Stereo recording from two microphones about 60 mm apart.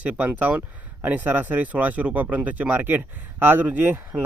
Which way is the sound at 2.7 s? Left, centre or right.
Right.